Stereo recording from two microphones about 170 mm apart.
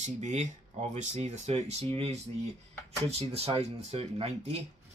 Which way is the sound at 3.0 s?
35° right (ahead or behind).